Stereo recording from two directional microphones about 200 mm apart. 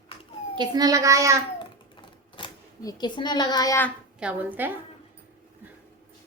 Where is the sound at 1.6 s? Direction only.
25° left (ahead or behind).